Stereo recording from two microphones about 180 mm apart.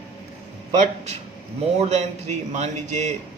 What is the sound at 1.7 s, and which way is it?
Speech, 35° right (ahead or behind).